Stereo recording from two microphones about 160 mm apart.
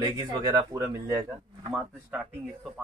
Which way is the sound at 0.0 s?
25° right (ahead or behind).